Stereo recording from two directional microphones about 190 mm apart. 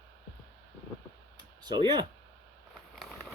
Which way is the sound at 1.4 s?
20° right (ahead or behind).